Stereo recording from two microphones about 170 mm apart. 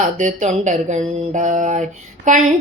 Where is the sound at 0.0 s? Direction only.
45° right (ahead or behind).